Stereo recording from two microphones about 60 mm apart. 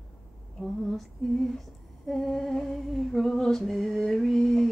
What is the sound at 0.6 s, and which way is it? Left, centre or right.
Female singing, centre.